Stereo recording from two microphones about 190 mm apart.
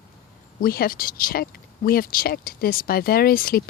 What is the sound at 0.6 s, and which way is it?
Speech, 50° left (ahead or behind).